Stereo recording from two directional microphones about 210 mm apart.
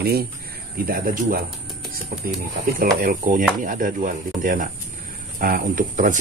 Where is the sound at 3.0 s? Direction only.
40° right (ahead or behind).